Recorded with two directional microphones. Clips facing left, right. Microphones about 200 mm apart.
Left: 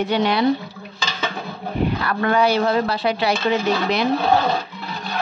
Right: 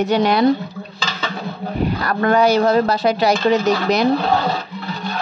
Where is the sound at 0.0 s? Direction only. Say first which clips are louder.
Right 4 dB; 45° right (ahead or behind).